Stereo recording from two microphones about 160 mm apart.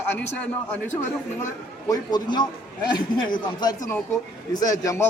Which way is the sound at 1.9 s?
25° left (ahead or behind).